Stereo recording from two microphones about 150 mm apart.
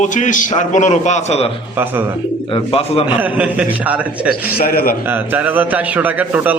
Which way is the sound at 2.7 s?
40° left (ahead or behind).